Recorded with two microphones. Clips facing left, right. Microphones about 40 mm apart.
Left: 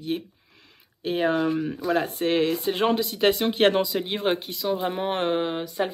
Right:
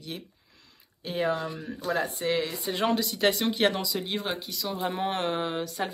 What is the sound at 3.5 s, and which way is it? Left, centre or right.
Speech, left.